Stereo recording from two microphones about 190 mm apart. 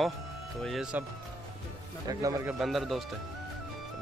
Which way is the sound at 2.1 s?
20° right (ahead or behind).